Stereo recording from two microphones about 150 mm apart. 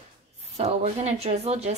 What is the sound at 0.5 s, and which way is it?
Speech, 45° right (ahead or behind).